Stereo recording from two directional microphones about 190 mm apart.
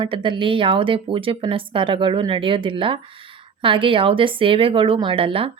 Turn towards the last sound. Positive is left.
turn(degrees=-30)  # may be behind; listen again after turning